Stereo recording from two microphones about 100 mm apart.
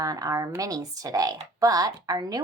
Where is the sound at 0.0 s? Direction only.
35° right (ahead or behind).